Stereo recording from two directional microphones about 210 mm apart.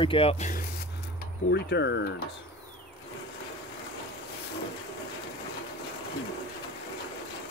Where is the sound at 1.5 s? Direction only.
55° left (ahead or behind).